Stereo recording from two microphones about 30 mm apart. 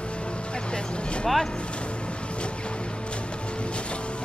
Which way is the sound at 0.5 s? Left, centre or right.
Left.